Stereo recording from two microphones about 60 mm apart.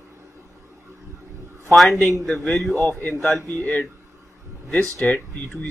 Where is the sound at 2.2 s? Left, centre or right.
Centre.